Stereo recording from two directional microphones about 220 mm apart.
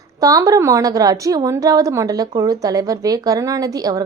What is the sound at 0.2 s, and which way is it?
A woman's voice, 15° right (ahead or behind).